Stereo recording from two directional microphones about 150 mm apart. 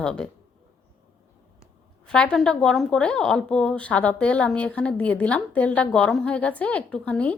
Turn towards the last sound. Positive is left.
turn(degrees=10)  # may be behind; listen again after turning